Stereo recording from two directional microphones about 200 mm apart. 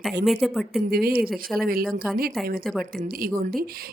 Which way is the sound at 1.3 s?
5° left (ahead or behind).